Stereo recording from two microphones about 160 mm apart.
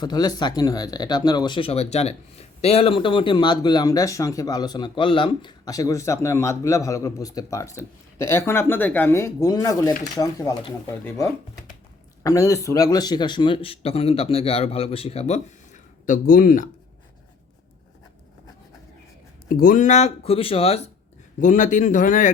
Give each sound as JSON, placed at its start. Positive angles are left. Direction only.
{"t": 0.0, "sound": "speech", "side_deg": 25}
{"t": 12.2, "sound": "a man's voice", "side_deg": 20}
{"t": 19.5, "sound": "speech", "side_deg": 60}
{"t": 21.4, "sound": "speech", "side_deg": 55}